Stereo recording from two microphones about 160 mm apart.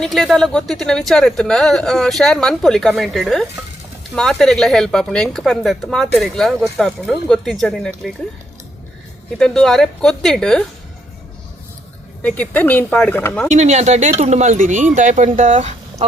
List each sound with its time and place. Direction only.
0.0 s speech: centre (ahead or behind)
9.4 s speech: centre (ahead or behind)
12.2 s speech: 10° left (ahead or behind)
13.5 s speech: 45° right (ahead or behind)